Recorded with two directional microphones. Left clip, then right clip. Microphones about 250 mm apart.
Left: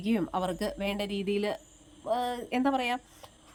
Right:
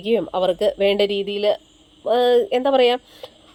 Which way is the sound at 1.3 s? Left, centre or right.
Left.